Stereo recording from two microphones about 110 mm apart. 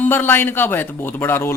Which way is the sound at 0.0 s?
20° left (ahead or behind).